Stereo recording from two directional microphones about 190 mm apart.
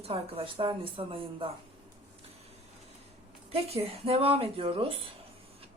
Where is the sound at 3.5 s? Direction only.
30° right (ahead or behind).